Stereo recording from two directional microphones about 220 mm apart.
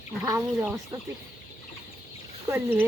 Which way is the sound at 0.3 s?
10° right (ahead or behind).